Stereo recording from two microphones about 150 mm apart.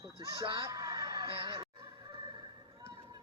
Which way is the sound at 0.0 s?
20° right (ahead or behind).